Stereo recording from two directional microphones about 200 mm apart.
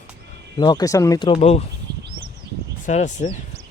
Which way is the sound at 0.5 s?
20° left (ahead or behind).